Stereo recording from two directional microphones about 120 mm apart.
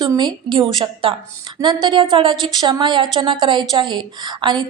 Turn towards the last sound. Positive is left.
turn(degrees=-40)  # may be behind; listen again after turning